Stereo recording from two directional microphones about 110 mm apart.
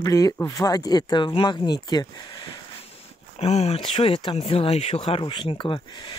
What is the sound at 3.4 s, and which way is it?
Speech, 75° left (ahead or behind).